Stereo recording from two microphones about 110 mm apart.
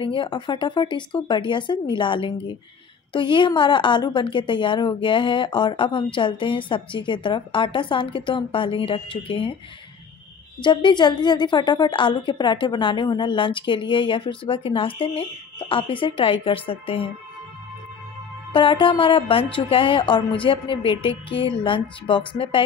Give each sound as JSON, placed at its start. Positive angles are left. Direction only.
{"t": 0.0, "sound": "a woman's voice", "side_deg": 50}
{"t": 10.6, "sound": "a woman's voice", "side_deg": 45}
{"t": 18.5, "sound": "a woman's voice", "side_deg": 50}